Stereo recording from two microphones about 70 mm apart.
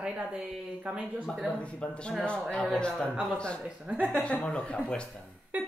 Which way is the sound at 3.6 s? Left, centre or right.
Centre.